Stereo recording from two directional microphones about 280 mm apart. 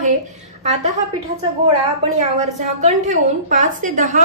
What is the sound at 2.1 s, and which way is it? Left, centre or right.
A woman's voice, right.